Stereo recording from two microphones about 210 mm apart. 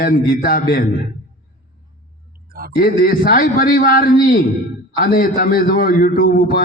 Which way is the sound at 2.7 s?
40° left (ahead or behind).